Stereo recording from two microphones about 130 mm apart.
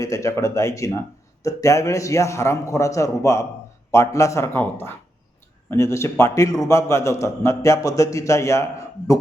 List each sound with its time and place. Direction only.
0.0 s a man's voice: 25° left (ahead or behind)